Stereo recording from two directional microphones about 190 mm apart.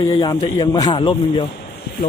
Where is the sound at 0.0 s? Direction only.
20° left (ahead or behind).